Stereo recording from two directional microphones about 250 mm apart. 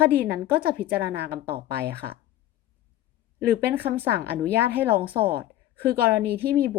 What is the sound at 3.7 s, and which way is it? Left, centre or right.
Speech, centre.